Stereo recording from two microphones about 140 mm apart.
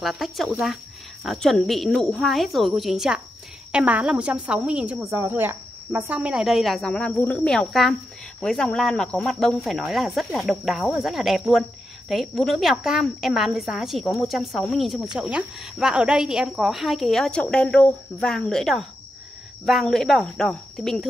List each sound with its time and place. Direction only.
0.0 s a woman's voice: centre (ahead or behind)
5.1 s a woman's voice: 15° right (ahead or behind); by 21.1 s 5° left (ahead or behind)